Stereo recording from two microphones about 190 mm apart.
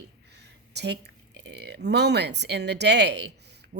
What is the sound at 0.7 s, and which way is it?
A woman's voice, 60° right (ahead or behind).